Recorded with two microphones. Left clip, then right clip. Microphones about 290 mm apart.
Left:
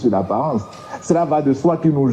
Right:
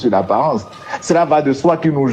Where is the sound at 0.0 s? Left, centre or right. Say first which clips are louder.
Right 4 dB; right.